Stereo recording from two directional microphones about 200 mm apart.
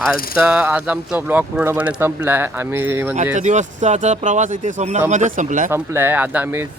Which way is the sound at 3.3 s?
35° right (ahead or behind).